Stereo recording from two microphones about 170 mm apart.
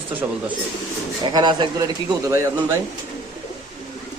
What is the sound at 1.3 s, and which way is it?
Speech, 25° right (ahead or behind).